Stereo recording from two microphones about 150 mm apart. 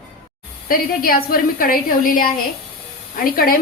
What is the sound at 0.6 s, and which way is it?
A woman's voice, 75° left (ahead or behind).